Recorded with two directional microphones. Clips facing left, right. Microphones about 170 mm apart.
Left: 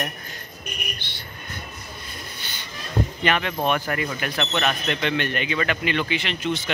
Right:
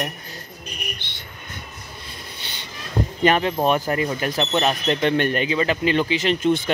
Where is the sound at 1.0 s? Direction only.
25° right (ahead or behind).